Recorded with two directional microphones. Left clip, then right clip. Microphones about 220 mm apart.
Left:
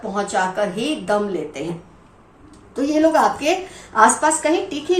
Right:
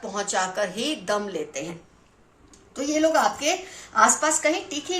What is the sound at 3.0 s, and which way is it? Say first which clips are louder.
A woman's voice: left 5 dB; 40° right (ahead or behind).